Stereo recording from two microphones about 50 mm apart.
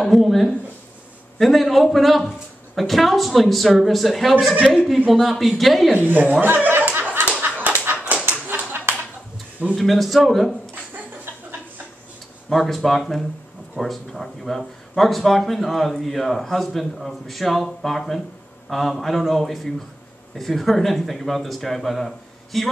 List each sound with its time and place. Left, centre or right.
0.0 s speech: centre
5.9 s speech: right
6.8 s a sound: right
7.4 s dog: right
7.7 s dog: right
9.8 s speech: centre
12.4 s speech: centre